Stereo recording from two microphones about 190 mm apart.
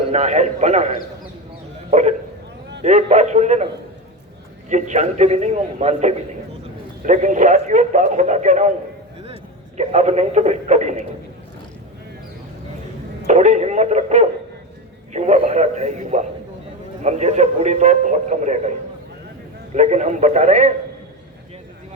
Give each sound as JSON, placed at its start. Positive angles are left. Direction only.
{"t": 0.1, "sound": "a man's voice", "side_deg": -35}
{"t": 4.7, "sound": "a man's voice", "side_deg": -40}
{"t": 13.2, "sound": "a man's voice", "side_deg": -40}
{"t": 19.7, "sound": "a man's voice", "side_deg": -40}